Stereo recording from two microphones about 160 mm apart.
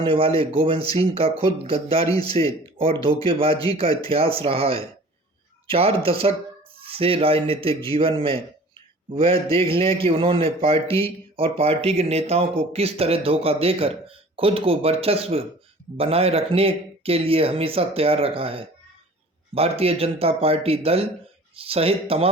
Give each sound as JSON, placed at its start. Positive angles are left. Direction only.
{"t": 0.0, "sound": "a man's voice", "side_deg": -35}